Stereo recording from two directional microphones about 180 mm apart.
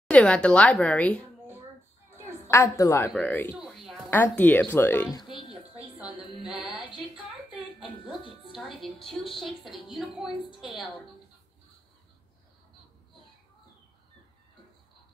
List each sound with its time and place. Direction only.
0.1 s a woman's voice: 5° left (ahead or behind)
2.5 s speech: 15° left (ahead or behind)
5.8 s a sound: 5° right (ahead or behind)
8.5 s a woman's voice: centre (ahead or behind)